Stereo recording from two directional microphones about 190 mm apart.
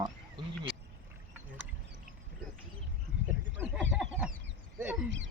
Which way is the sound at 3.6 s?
10° right (ahead or behind).